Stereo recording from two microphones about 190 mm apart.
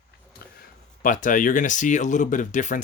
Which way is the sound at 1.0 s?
45° left (ahead or behind).